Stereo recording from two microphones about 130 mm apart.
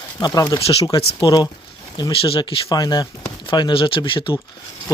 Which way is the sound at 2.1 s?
45° left (ahead or behind).